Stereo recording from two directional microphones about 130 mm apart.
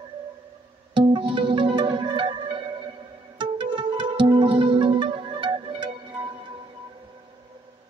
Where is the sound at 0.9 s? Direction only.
40° right (ahead or behind).